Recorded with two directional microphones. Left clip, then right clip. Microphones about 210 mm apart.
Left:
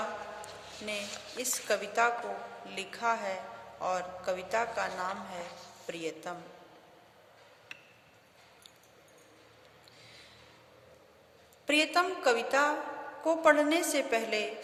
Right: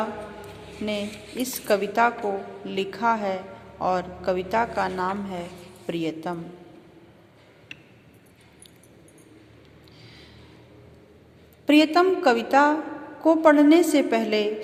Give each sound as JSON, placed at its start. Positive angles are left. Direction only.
{"t": 0.9, "sound": "a woman's voice", "side_deg": -15}
{"t": 7.7, "sound": "a sound", "side_deg": -10}
{"t": 11.6, "sound": "a woman's voice", "side_deg": -15}